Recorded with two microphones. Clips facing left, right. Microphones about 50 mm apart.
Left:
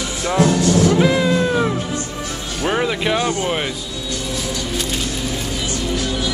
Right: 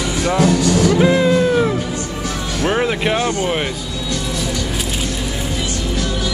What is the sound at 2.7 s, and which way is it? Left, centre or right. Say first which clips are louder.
Speech: right 1 dB; centre.